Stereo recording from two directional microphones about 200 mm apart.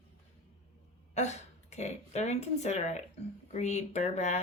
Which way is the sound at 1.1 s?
35° left (ahead or behind).